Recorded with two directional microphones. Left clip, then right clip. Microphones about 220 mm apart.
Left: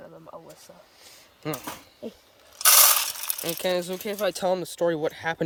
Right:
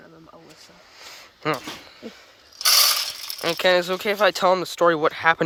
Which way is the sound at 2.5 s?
35° left (ahead or behind).